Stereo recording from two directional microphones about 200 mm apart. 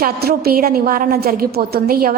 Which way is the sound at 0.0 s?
50° right (ahead or behind).